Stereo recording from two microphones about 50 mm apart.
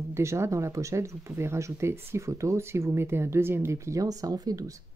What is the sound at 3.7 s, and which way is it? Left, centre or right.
Speech, right.